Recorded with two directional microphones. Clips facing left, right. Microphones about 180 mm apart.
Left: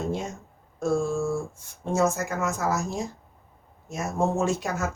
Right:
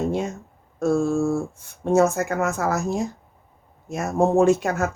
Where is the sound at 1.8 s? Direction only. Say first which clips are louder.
Right 6 dB; 60° right (ahead or behind).